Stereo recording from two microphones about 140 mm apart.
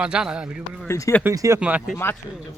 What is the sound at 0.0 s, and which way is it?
Speech, 5° right (ahead or behind).